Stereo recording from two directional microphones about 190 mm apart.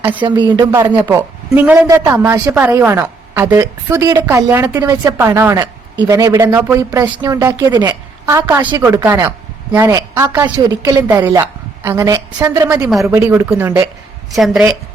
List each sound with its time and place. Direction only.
0.0 s speech: 10° right (ahead or behind)
0.3 s a woman's voice: 25° right (ahead or behind)
8.4 s a woman's voice: 10° right (ahead or behind)
14.3 s a woman's voice: centre (ahead or behind)